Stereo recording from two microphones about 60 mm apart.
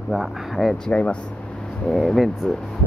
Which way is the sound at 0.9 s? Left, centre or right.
Left.